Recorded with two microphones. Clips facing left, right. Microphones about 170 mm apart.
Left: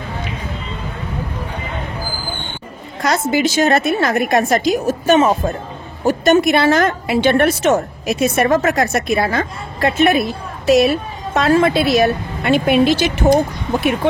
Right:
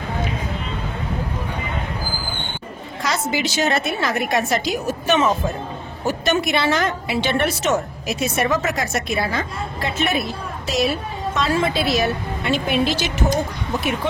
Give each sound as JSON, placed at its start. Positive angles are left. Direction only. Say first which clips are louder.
{"t": 3.0, "sound": "a woman's voice", "louder": "left 7 dB", "side_deg": 50}
{"t": 11.3, "sound": "a woman's voice", "louder": "left 8 dB", "side_deg": 60}